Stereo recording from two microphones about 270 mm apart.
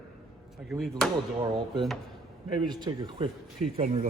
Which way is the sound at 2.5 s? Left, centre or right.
Centre.